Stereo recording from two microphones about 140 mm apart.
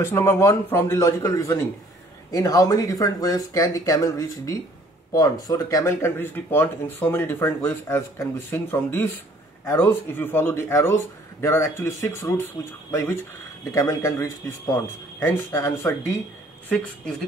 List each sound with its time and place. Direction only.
0.0 s speech: 20° left (ahead or behind)